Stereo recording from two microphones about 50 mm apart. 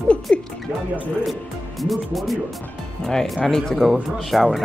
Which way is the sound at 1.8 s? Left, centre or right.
Centre.